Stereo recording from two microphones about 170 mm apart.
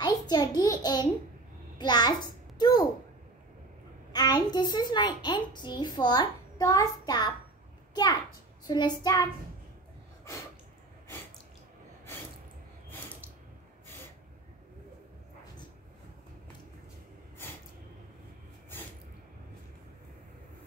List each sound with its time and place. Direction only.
0.0 s a sound: 25° left (ahead or behind)
4.1 s a child's voice: 25° left (ahead or behind)
8.6 s child singing: 25° left (ahead or behind)